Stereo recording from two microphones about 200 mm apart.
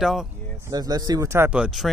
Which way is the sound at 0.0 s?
Centre (ahead or behind).